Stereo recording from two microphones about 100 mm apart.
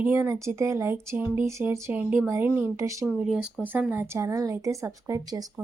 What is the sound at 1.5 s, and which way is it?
Speech, 30° right (ahead or behind).